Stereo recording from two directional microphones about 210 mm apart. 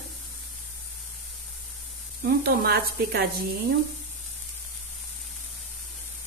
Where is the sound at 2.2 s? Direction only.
45° right (ahead or behind).